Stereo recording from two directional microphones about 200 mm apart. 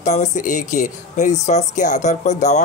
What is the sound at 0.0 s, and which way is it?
Speech, 35° left (ahead or behind).